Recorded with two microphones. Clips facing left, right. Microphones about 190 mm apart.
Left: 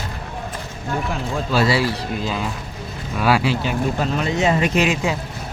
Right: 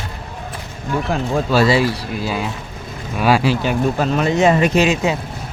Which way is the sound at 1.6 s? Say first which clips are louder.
Right 3 dB; 15° right (ahead or behind).